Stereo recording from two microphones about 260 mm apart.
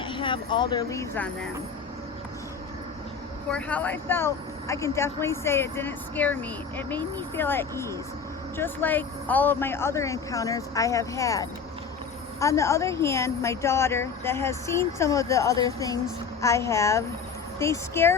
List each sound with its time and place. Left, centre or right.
0.0 s speech: centre
3.5 s speech: centre